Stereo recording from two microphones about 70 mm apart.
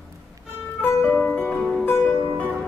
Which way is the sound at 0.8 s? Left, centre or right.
Left.